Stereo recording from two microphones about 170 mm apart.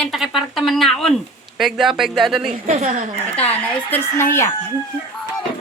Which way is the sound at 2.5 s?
40° right (ahead or behind).